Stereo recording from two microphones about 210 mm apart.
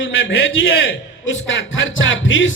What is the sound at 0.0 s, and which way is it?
A man's voice, 65° left (ahead or behind).